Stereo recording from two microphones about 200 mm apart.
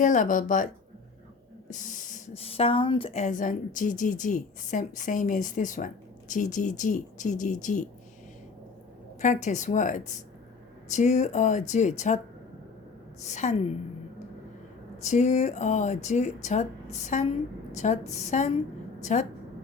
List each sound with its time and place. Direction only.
0.0 s speech: 40° left (ahead or behind)
1.8 s speech: 40° left (ahead or behind)
9.2 s speech: 35° left (ahead or behind)
13.2 s speech: 35° left (ahead or behind)
15.0 s speech: 35° left (ahead or behind)